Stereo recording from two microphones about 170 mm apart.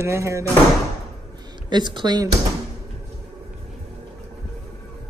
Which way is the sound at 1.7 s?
25° right (ahead or behind).